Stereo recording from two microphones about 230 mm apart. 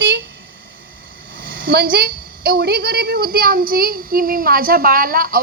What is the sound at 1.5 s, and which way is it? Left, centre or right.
A woman's voice, right.